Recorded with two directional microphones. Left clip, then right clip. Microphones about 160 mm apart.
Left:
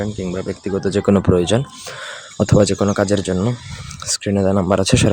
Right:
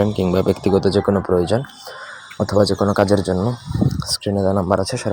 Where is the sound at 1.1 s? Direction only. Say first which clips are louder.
Left 1 dB; 50° left (ahead or behind).